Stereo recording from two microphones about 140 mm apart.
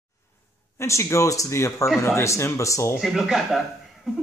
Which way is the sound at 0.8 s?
20° left (ahead or behind).